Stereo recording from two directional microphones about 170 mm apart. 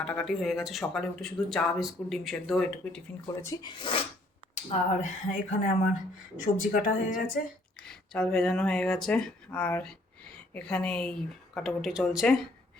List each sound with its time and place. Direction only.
0.0 s speech: 5° left (ahead or behind)
3.4 s speech: 25° left (ahead or behind)
4.5 s speech: 45° left (ahead or behind)
7.9 s speech: 5° left (ahead or behind)